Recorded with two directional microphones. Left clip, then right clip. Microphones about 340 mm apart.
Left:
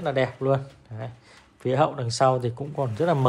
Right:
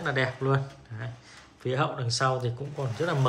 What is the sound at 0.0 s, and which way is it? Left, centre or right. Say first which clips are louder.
Speech: left 3 dB; centre.